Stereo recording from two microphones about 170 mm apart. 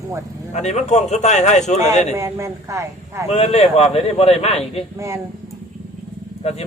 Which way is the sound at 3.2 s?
40° left (ahead or behind).